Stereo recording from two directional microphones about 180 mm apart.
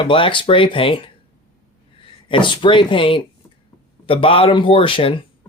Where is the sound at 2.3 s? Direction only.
25° left (ahead or behind).